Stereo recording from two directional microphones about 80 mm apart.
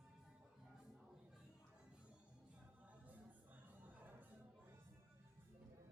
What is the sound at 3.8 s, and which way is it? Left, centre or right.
Music, right.